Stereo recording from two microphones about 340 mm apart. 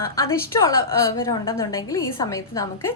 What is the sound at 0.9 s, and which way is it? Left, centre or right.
A woman's voice, centre.